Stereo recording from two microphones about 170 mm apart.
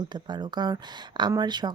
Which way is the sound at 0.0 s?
25° right (ahead or behind).